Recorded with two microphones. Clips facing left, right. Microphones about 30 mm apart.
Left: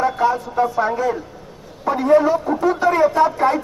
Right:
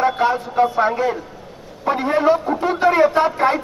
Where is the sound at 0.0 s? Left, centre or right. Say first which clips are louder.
Even; right.